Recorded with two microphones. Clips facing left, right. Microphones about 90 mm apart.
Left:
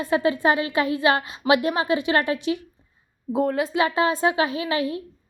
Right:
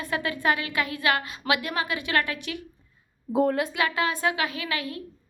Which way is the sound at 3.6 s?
25° left (ahead or behind).